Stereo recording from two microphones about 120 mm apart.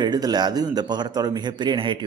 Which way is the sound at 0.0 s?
35° right (ahead or behind).